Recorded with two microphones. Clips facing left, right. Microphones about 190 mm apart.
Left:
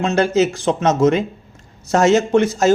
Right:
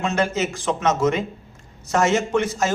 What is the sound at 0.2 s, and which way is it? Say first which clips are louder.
Speech: left 7 dB; 35° left (ahead or behind).